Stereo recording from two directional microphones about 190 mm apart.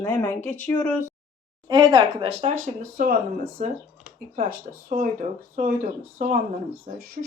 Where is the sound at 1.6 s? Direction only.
25° right (ahead or behind).